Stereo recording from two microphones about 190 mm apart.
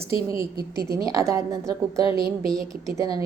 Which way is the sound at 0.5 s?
55° right (ahead or behind).